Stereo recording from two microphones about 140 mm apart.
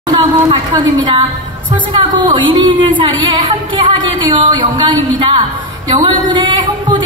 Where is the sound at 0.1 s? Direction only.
35° right (ahead or behind).